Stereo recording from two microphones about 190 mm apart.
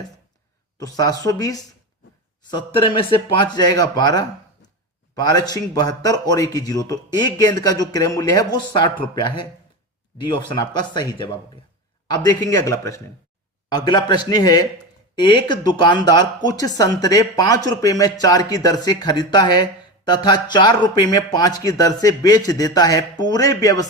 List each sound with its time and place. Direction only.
0.8 s speech: 20° left (ahead or behind)